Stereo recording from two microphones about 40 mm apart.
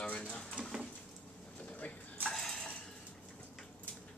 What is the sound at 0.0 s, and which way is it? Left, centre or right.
Drawer open or close, left.